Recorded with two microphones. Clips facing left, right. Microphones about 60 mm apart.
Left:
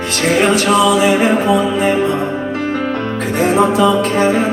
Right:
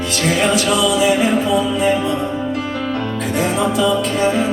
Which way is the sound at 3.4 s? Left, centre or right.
Left.